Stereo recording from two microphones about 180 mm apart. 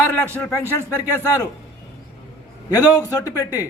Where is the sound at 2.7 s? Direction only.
20° left (ahead or behind).